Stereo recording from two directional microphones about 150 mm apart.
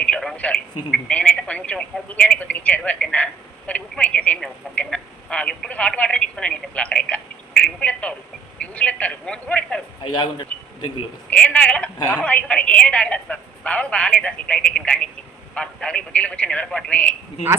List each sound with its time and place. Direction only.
0.0 s speech: 5° left (ahead or behind)
10.0 s speech: 30° left (ahead or behind)
10.5 s a man's voice: 10° left (ahead or behind)